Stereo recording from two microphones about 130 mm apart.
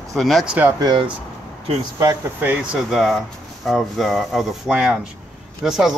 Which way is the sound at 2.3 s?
15° right (ahead or behind).